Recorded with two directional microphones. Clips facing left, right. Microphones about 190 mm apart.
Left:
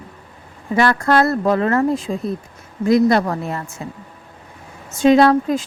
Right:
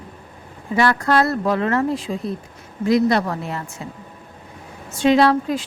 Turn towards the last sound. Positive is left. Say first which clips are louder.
# left 3 dB
turn(degrees=45)  # may be behind; listen again after turning